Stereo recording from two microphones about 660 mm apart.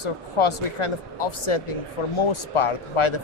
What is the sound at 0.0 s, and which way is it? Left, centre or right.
Speech, left.